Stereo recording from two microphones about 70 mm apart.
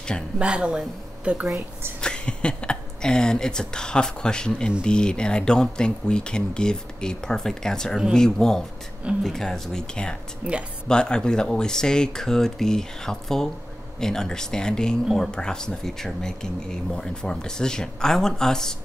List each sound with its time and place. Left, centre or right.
0.4 s speech: centre
2.0 s speech: centre
10.4 s speech: centre
10.9 s speech: centre